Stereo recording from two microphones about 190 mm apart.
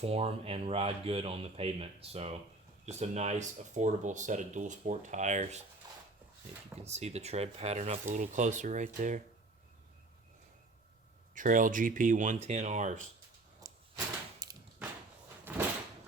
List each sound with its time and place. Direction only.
0.0 s speech: 30° right (ahead or behind)
5.8 s a sound: 20° right (ahead or behind)
6.8 s speech: 35° right (ahead or behind)
11.3 s speech: 45° right (ahead or behind)
13.6 s a sound: 20° right (ahead or behind)
15.5 s door: 10° right (ahead or behind)